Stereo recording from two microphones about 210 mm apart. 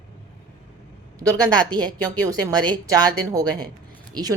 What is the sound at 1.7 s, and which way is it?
Speech, 20° right (ahead or behind).